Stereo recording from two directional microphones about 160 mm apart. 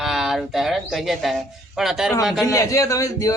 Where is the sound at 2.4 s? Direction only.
20° left (ahead or behind).